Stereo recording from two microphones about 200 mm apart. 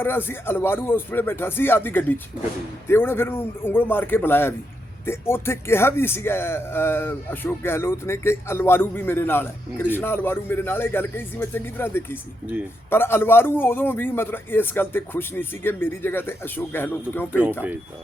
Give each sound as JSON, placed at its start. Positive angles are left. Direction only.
{"t": 0.0, "sound": "a man's voice", "side_deg": 10}